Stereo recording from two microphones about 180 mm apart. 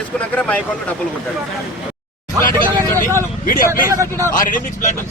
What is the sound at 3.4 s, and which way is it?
Speech, 50° left (ahead or behind).